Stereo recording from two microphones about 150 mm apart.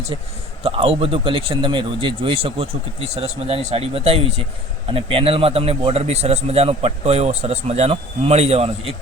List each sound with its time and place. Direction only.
0.6 s a man's voice: 40° right (ahead or behind)